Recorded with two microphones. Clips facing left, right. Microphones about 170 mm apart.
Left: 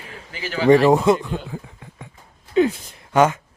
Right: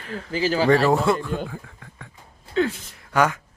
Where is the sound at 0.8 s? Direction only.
20° left (ahead or behind).